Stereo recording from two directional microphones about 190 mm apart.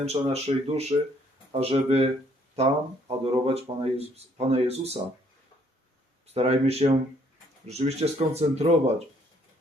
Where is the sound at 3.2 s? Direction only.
30° right (ahead or behind).